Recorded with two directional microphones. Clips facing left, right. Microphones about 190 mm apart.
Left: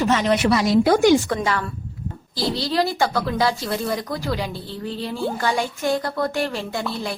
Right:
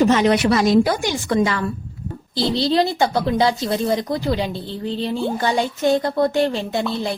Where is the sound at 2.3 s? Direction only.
25° right (ahead or behind).